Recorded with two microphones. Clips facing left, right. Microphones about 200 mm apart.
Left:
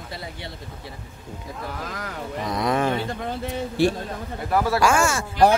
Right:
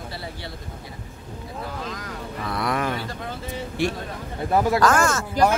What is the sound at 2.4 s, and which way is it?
A man's voice, 20° left (ahead or behind).